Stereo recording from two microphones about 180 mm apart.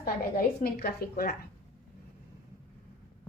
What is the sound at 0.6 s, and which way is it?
Speech, 55° left (ahead or behind).